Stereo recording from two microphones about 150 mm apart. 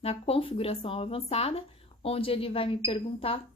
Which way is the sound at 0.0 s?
40° left (ahead or behind).